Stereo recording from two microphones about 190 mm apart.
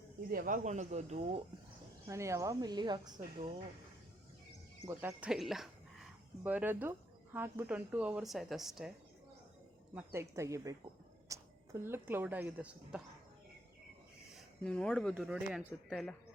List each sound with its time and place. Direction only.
0.3 s speech: 45° right (ahead or behind)
2.0 s speech: 15° right (ahead or behind)
4.9 s a woman's voice: 10° right (ahead or behind)
9.9 s speech: 15° right (ahead or behind)
14.3 s speech: 5° left (ahead or behind)
15.1 s a woman's voice: 5° right (ahead or behind)